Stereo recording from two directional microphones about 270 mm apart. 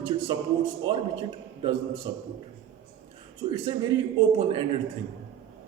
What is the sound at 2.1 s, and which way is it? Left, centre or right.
Speech, centre.